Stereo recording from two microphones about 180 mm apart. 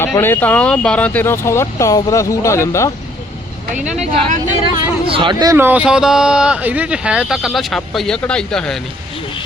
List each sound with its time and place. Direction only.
0.0 s speech: 10° left (ahead or behind)
3.9 s speech: 35° right (ahead or behind); by 8.8 s 5° left (ahead or behind)